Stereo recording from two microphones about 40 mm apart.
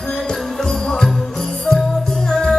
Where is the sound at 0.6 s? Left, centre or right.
Centre.